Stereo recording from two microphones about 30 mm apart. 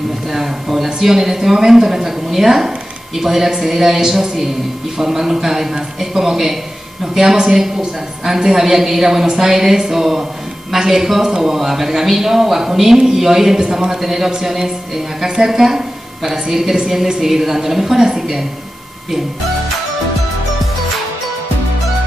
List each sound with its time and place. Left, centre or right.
0.3 s a man's voice: centre
7.5 s a man's voice: centre